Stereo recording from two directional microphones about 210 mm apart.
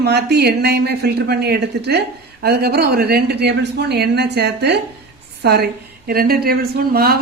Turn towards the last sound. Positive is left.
turn(degrees=-45)  # may be behind; listen again after turning